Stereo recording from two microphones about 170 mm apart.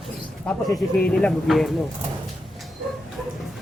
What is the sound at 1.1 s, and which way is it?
Speech, 5° left (ahead or behind).